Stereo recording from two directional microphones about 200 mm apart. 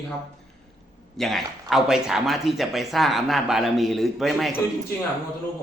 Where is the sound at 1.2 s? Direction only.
Centre (ahead or behind).